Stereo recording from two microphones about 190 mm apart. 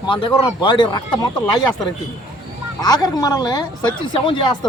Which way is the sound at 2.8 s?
20° left (ahead or behind).